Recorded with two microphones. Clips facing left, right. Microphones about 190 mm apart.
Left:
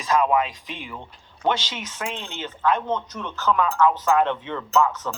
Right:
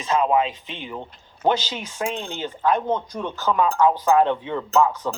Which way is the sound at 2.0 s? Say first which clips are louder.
Right 5 dB; 40° right (ahead or behind).